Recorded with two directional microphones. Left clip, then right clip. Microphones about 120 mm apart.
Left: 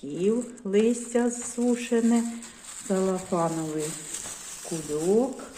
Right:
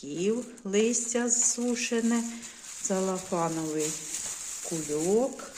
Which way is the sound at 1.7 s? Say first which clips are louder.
Left 4 dB; 25° right (ahead or behind).